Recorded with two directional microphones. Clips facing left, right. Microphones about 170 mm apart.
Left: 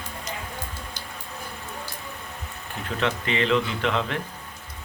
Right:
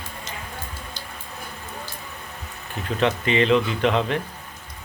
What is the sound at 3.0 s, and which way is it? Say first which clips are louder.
Speech: right 5 dB; 20° right (ahead or behind).